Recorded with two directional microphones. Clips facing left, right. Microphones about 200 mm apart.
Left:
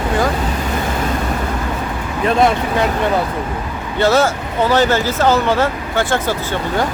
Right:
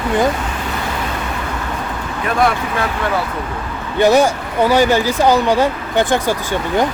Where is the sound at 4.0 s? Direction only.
15° right (ahead or behind).